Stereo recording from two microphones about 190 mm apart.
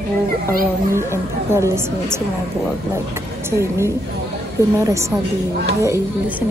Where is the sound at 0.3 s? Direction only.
50° right (ahead or behind).